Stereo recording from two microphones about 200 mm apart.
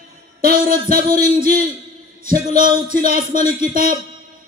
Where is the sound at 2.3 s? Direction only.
45° right (ahead or behind).